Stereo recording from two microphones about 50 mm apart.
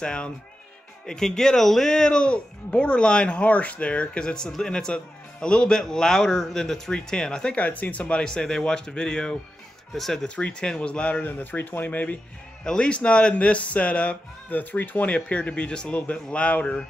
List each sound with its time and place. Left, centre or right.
0.0 s a man's voice: centre
7.5 s speech: left
8.2 s a man's voice: centre
9.9 s speech: centre
10.2 s speech: left
11.2 s speech: left
12.6 s speech: left
15.1 s speech: left